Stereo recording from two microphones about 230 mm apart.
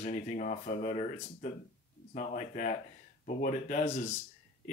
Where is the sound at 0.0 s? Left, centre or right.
Left.